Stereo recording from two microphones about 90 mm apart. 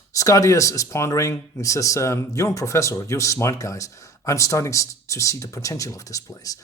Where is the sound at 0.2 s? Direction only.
40° left (ahead or behind).